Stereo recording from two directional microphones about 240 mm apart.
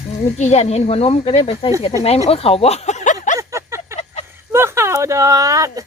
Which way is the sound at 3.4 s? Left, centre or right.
Centre.